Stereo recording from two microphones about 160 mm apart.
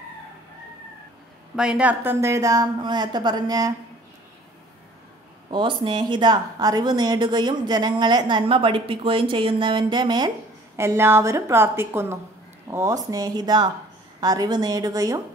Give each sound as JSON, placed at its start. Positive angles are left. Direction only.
{"t": 1.6, "sound": "speech", "side_deg": -5}
{"t": 5.5, "sound": "speech", "side_deg": -30}
{"t": 10.8, "sound": "a woman's voice", "side_deg": -15}